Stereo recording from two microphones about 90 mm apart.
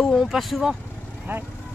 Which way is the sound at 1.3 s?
20° right (ahead or behind).